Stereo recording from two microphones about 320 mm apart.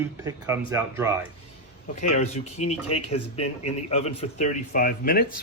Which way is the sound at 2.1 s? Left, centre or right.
Left.